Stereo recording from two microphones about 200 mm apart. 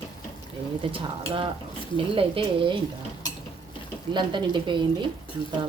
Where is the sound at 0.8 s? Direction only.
25° right (ahead or behind).